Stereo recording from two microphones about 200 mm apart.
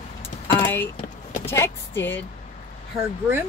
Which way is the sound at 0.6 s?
10° left (ahead or behind).